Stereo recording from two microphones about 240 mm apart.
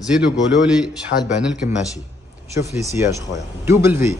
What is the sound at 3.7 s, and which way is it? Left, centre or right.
Speech, centre.